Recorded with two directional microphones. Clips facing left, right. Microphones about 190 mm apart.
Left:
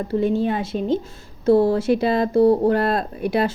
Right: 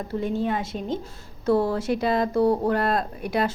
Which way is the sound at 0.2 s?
30° left (ahead or behind).